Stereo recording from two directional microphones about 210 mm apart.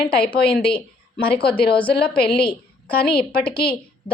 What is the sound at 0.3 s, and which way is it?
A woman's voice, 50° left (ahead or behind).